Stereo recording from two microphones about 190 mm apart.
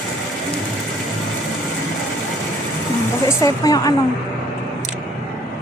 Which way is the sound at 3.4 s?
20° left (ahead or behind).